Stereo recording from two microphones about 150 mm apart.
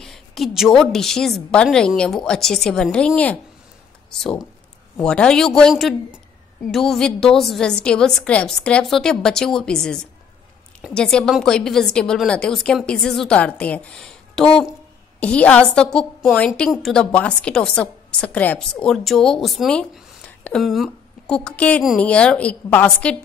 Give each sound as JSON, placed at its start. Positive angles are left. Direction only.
{"t": 0.0, "sound": "a woman's voice", "side_deg": 0}